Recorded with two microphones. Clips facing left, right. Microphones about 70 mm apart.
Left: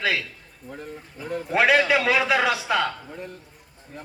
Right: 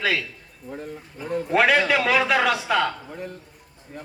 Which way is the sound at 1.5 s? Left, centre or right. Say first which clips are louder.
Even; centre.